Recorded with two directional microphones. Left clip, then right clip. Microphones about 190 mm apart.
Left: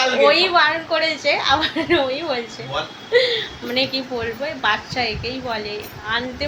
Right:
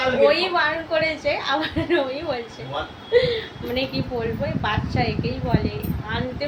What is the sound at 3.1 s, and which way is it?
A woman's voice, 5° left (ahead or behind).